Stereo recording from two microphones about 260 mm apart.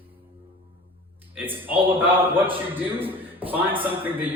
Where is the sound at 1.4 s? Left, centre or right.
Centre.